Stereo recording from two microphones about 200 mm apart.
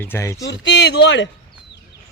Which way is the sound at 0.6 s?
65° left (ahead or behind).